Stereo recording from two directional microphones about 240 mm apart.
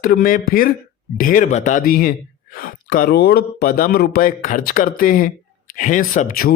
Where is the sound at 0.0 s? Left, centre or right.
Left.